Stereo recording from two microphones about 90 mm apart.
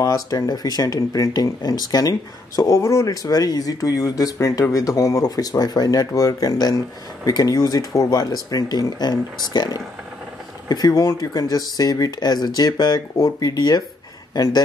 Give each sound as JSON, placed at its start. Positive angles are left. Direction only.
{"t": 0.0, "sound": "speech", "side_deg": 40}